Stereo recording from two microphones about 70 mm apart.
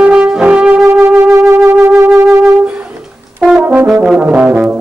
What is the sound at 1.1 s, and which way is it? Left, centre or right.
Wind instrument, right.